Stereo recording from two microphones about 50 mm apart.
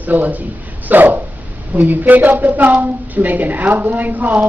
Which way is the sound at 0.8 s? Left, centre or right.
Right.